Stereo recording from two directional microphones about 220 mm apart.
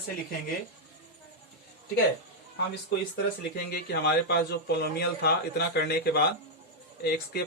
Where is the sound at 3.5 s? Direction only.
45° left (ahead or behind).